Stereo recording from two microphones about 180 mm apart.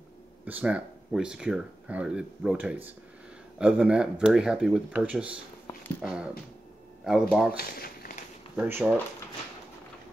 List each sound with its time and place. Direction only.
0.5 s speech: 10° right (ahead or behind)
7.5 s speech: 55° left (ahead or behind)
8.5 s speech: 10° right (ahead or behind)